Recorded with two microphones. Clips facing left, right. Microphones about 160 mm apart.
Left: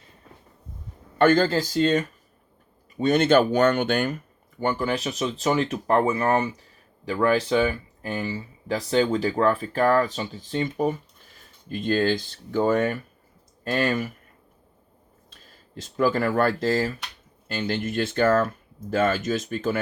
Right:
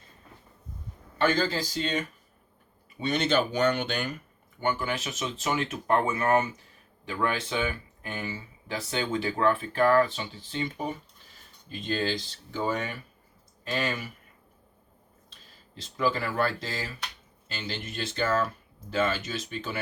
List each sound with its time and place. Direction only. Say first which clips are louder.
1.2 s speech: left 7 dB; 50° left (ahead or behind)
4.6 s speech: left 5 dB; 35° left (ahead or behind)
15.3 s speech: left 7 dB; 50° left (ahead or behind)